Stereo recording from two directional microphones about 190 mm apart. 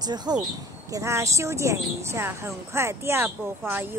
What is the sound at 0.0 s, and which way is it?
Speech, 20° right (ahead or behind).